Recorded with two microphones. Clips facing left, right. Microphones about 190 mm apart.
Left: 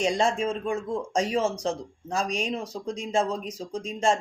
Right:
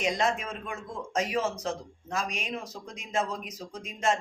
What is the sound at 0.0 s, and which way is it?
Speech, 30° left (ahead or behind).